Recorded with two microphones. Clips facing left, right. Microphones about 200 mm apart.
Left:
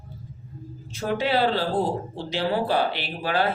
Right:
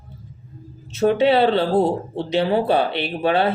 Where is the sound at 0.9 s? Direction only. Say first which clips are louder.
Right 8 dB; 25° right (ahead or behind).